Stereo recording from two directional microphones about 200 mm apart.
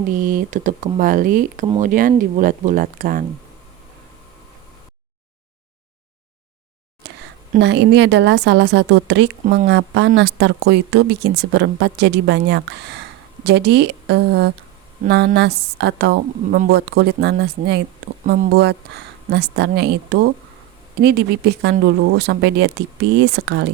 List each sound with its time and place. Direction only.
0.2 s speech: 45° right (ahead or behind)
7.6 s speech: 60° right (ahead or behind)